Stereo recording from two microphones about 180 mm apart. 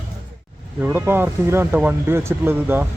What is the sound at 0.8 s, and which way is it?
Speech, 10° right (ahead or behind).